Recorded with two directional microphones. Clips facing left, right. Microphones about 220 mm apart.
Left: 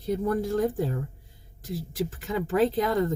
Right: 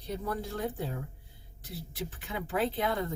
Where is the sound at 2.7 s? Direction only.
40° left (ahead or behind).